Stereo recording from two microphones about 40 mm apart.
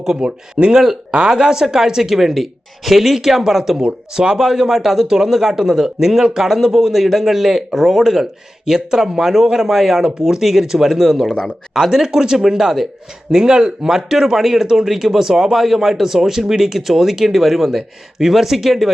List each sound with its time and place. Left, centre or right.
0.0 s speech: centre